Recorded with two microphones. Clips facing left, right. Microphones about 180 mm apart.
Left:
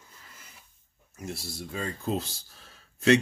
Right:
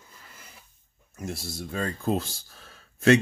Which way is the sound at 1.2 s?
50° right (ahead or behind).